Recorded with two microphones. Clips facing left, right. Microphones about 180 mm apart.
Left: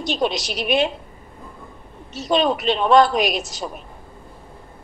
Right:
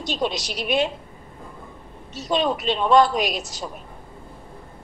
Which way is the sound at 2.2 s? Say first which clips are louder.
Left 3 dB; 70° left (ahead or behind).